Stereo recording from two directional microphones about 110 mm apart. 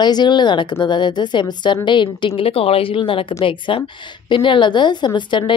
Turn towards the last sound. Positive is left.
turn(degrees=45)  # may be behind; listen again after turning